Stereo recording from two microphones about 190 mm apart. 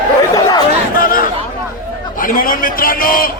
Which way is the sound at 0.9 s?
50° left (ahead or behind).